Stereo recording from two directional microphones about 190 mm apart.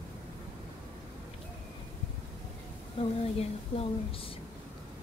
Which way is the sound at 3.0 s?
30° left (ahead or behind).